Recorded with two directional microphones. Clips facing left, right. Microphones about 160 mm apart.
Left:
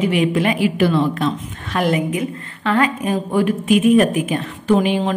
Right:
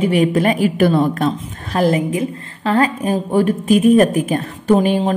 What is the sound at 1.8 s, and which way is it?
A woman's voice, 30° right (ahead or behind).